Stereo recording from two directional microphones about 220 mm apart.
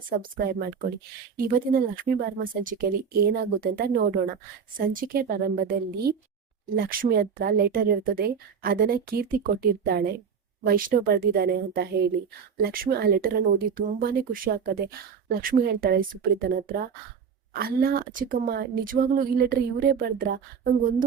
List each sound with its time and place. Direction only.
0.1 s speech: 45° right (ahead or behind)